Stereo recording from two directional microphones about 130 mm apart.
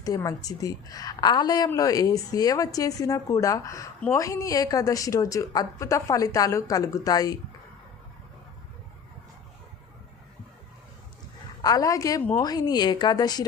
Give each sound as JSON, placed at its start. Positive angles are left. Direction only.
{"t": 0.0, "sound": "a woman's voice", "side_deg": 25}
{"t": 11.6, "sound": "a woman's voice", "side_deg": 30}